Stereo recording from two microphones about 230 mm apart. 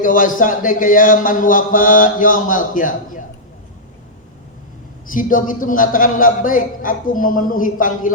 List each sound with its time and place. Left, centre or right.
0.0 s speech: left
5.0 s speech: left